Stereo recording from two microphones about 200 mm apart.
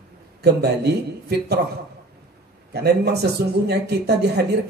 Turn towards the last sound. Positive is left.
turn(degrees=-55)  # may be behind; listen again after turning